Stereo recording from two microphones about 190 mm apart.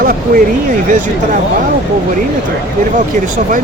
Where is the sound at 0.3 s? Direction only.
50° right (ahead or behind).